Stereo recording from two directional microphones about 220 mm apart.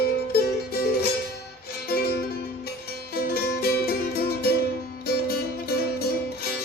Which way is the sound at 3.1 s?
45° left (ahead or behind).